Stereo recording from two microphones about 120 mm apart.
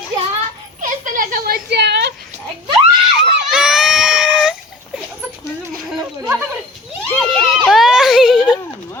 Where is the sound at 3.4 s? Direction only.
5° right (ahead or behind).